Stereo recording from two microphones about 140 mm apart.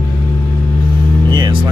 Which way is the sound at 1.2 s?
30° right (ahead or behind).